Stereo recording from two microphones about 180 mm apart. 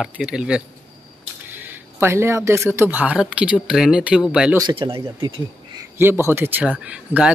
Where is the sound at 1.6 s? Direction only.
10° right (ahead or behind).